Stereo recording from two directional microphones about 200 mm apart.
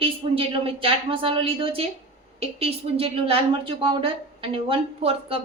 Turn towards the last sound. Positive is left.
turn(degrees=-25)  # may be behind; listen again after turning